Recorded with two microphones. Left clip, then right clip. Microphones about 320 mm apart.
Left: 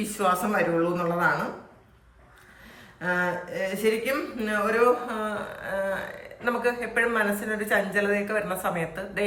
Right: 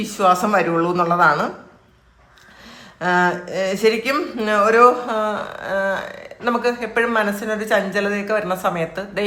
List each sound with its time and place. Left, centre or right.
0.0 s a woman's voice: centre
3.5 s a woman's voice: centre